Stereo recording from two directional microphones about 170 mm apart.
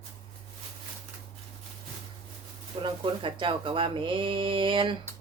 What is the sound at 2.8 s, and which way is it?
Speech, 30° right (ahead or behind).